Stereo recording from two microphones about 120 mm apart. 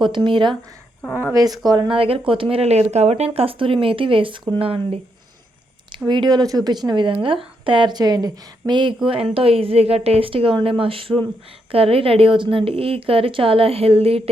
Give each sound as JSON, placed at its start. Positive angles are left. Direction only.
{"t": 0.0, "sound": "a woman's voice", "side_deg": -40}
{"t": 2.0, "sound": "a woman's voice", "side_deg": -50}
{"t": 6.1, "sound": "a woman's voice", "side_deg": -35}
{"t": 9.0, "sound": "a woman's voice", "side_deg": -50}